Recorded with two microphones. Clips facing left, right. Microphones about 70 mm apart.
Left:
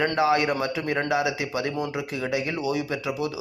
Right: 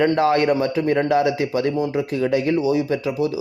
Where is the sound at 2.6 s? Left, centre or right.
Right.